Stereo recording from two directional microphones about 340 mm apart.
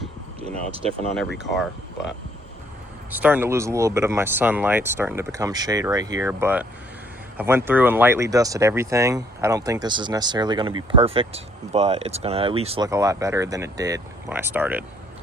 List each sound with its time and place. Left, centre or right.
0.4 s speech: centre
3.1 s speech: centre